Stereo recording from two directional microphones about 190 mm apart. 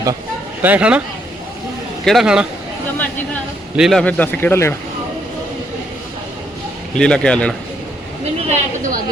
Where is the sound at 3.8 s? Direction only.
Centre (ahead or behind).